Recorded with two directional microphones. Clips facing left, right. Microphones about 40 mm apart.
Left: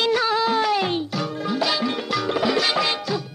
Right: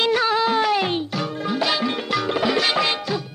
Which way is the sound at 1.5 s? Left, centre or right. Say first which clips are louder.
Right 1 dB; right.